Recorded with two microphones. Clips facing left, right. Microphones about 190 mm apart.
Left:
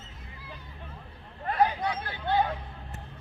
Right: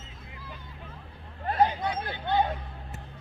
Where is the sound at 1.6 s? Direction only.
20° right (ahead or behind).